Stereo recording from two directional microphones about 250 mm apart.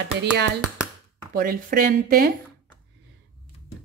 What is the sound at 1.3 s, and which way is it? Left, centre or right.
Speech, right.